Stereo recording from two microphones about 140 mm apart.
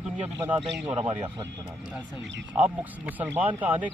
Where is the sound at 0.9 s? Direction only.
40° right (ahead or behind).